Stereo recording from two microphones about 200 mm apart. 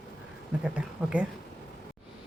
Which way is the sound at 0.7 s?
5° right (ahead or behind).